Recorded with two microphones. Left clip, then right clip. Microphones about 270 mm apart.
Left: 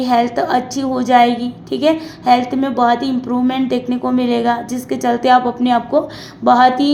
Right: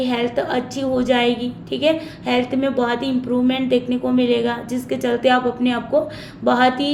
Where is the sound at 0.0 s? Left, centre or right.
Centre.